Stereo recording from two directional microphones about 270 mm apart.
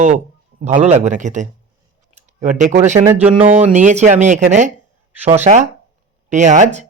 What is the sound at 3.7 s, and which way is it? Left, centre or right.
Speech, right.